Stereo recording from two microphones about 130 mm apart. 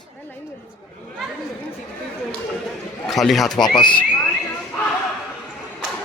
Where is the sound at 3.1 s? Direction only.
Centre (ahead or behind).